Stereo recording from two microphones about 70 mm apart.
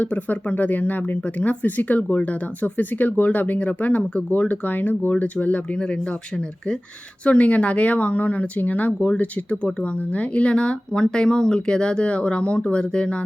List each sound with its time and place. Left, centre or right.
0.0 s speech: left